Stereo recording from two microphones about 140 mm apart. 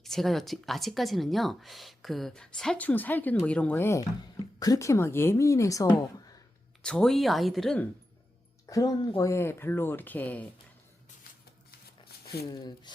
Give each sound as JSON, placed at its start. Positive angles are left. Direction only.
{"t": 0.0, "sound": "speech", "side_deg": 0}
{"t": 6.8, "sound": "speech", "side_deg": 5}
{"t": 8.6, "sound": "speech", "side_deg": 25}
{"t": 12.3, "sound": "speech", "side_deg": 30}